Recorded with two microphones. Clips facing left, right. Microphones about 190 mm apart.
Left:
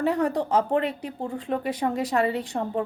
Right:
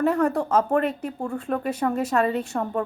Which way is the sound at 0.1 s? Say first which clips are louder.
Right 2 dB; 15° left (ahead or behind).